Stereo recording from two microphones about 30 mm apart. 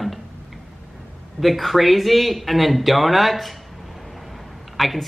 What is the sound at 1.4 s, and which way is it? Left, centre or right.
Speech, centre.